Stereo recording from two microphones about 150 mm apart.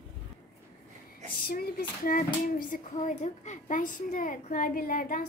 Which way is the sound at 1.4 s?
75° left (ahead or behind).